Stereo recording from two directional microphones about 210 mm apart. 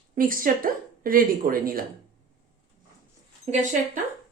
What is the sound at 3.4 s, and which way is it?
Speech, 35° right (ahead or behind).